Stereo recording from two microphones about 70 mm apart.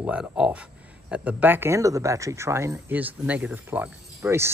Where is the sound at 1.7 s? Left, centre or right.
Right.